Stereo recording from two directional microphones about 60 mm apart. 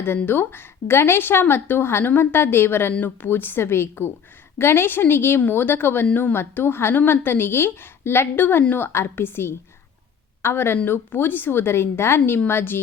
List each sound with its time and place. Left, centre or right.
0.3 s a woman's voice: left